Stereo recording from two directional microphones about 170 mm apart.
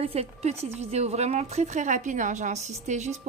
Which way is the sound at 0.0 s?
40° right (ahead or behind).